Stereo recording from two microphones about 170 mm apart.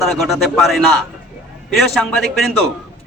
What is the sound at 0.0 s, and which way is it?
A man's voice, centre (ahead or behind).